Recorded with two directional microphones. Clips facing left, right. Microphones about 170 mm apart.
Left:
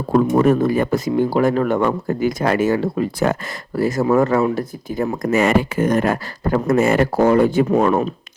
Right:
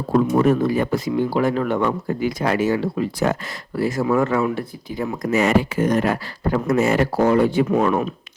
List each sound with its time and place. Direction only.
0.1 s speech: 45° left (ahead or behind)